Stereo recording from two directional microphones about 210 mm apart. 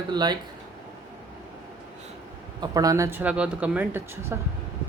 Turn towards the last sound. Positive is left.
turn(degrees=-10)  # may be behind; listen again after turning